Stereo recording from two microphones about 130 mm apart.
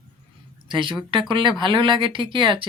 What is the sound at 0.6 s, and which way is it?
Speech, 40° right (ahead or behind).